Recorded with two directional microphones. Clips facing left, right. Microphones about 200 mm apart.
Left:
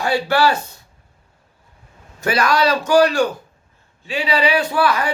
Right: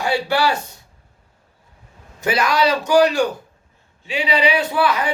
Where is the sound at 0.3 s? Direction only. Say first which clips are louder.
Left 4 dB; 15° right (ahead or behind).